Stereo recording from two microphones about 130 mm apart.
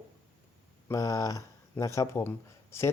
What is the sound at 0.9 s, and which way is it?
Speech, 25° left (ahead or behind).